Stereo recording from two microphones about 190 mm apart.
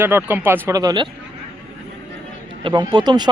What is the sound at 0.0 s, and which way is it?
Speech, 10° right (ahead or behind).